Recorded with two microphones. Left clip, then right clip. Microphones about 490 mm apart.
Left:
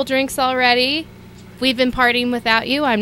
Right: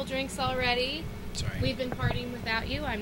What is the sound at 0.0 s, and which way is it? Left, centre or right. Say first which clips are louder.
Speech: left 14 dB; left.